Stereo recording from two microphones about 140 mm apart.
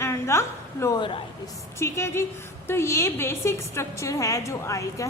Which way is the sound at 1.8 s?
20° left (ahead or behind).